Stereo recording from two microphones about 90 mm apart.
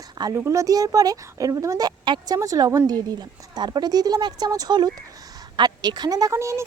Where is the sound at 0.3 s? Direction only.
35° right (ahead or behind).